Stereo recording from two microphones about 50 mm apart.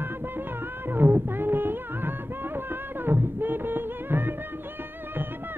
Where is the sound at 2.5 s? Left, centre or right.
Right.